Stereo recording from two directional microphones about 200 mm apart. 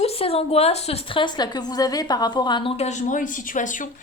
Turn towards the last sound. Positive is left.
turn(degrees=40)  # may be behind; listen again after turning